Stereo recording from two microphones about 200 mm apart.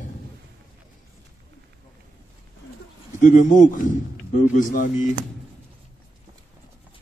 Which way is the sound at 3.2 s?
40° left (ahead or behind).